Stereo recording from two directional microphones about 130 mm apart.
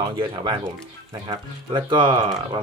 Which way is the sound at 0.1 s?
35° right (ahead or behind).